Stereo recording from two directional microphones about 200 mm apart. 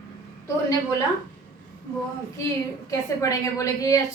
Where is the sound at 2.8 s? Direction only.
15° left (ahead or behind).